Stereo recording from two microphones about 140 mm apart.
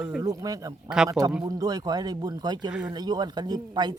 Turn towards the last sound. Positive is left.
turn(degrees=-30)  # may be behind; listen again after turning